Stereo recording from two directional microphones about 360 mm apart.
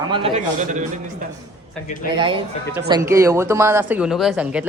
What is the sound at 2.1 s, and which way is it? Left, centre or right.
Speech, centre.